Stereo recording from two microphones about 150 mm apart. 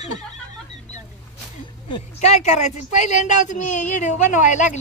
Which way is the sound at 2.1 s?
50° left (ahead or behind).